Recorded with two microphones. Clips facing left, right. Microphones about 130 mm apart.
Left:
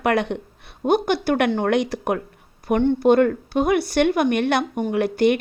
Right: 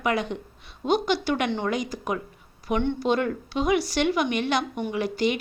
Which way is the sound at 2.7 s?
45° left (ahead or behind).